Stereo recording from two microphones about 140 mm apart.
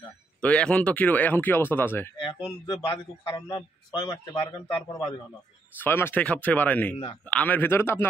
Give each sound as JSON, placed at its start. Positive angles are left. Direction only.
{"t": 0.4, "sound": "speech", "side_deg": 10}
{"t": 2.4, "sound": "a man's voice", "side_deg": 30}
{"t": 5.8, "sound": "speech", "side_deg": 15}